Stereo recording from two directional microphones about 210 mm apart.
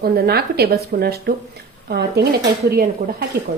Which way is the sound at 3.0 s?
35° right (ahead or behind).